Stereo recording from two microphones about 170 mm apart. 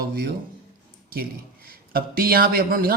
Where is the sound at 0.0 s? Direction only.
65° right (ahead or behind).